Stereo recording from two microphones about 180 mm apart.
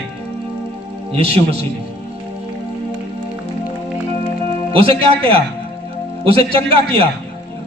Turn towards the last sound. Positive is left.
turn(degrees=-30)  # may be behind; listen again after turning